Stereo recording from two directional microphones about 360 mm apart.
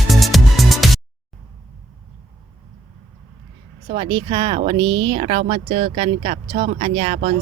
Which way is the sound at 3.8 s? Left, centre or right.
Centre.